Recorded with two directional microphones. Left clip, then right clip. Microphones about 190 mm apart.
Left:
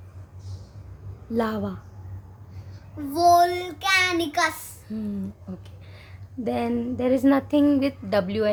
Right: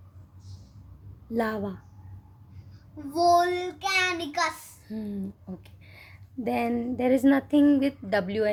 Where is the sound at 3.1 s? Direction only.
25° left (ahead or behind).